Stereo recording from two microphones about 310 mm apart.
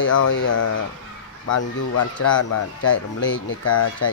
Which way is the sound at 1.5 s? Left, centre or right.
Left.